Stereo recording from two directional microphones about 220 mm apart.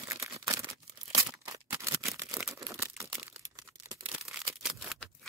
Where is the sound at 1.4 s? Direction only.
15° right (ahead or behind).